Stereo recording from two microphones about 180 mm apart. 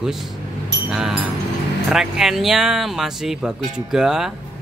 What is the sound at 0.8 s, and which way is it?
Speech, 5° right (ahead or behind).